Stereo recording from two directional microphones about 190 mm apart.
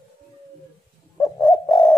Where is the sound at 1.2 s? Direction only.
15° left (ahead or behind).